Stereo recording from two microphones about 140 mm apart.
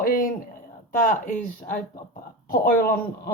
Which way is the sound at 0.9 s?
75° left (ahead or behind).